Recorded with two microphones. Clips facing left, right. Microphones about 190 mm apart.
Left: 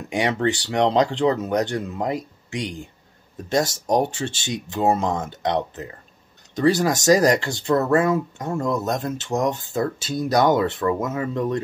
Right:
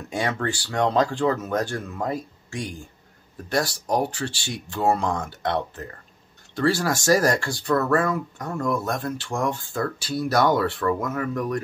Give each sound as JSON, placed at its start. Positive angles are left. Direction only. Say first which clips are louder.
{"t": 0.1, "sound": "speech", "louder": "left 5 dB", "side_deg": 20}